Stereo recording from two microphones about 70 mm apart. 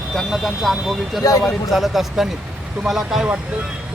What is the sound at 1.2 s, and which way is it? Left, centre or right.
Speech, left.